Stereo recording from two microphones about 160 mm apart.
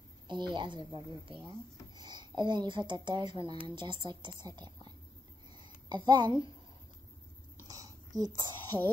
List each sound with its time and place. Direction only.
0.3 s a woman's voice: 30° right (ahead or behind)
7.6 s a sound: 20° right (ahead or behind)
8.5 s speech: 30° right (ahead or behind)